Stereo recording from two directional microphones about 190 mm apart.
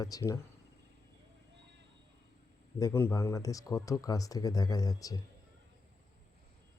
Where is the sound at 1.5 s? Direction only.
65° right (ahead or behind).